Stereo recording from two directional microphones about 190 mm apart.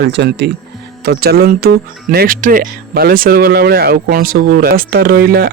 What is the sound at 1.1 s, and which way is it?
A man's voice, 55° right (ahead or behind).